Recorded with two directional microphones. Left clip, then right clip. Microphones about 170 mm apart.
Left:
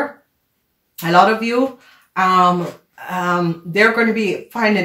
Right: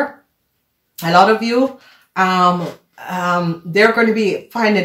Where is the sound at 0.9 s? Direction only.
30° right (ahead or behind).